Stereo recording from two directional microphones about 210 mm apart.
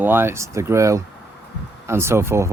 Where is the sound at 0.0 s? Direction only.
10° right (ahead or behind).